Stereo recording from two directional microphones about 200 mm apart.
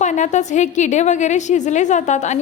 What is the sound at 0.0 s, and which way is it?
A woman's voice, 35° left (ahead or behind).